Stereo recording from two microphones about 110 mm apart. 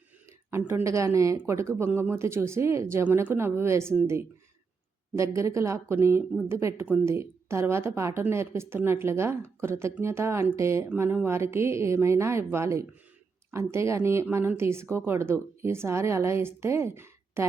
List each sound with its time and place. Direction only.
0.5 s speech: 25° right (ahead or behind)